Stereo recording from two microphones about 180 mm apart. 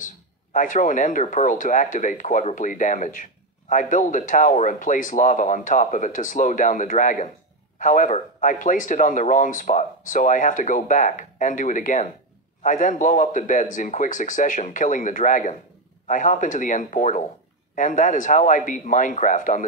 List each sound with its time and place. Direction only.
0.0 s speech: 45° left (ahead or behind)